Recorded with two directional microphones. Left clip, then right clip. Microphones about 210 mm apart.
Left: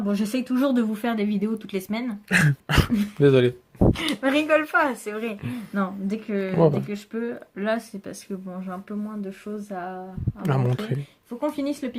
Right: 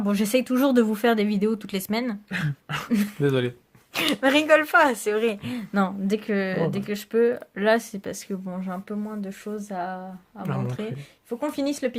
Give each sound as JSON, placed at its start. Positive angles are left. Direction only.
{"t": 0.0, "sound": "speech", "side_deg": -45}
{"t": 2.3, "sound": "speech", "side_deg": 40}
{"t": 3.2, "sound": "speech", "side_deg": 20}
{"t": 3.9, "sound": "speech", "side_deg": -45}
{"t": 10.4, "sound": "speech", "side_deg": 25}
{"t": 11.3, "sound": "speech", "side_deg": -40}